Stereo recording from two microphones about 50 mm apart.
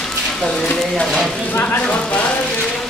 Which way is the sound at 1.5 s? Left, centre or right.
Left.